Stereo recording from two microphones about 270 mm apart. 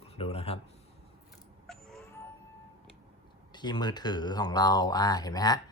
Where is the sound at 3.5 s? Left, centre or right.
Centre.